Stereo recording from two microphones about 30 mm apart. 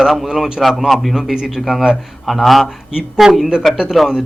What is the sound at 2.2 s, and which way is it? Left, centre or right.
Speech, centre.